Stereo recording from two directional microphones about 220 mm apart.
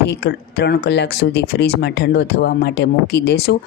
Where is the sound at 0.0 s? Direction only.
45° left (ahead or behind).